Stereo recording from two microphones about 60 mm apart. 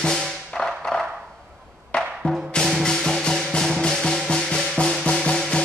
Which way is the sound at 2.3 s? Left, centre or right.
Centre.